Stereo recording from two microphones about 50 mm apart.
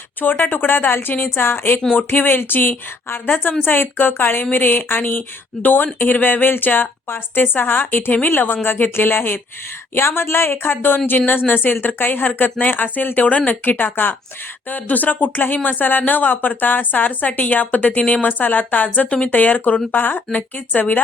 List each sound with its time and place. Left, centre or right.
0.2 s a woman's voice: left
1.9 s a woman's voice: left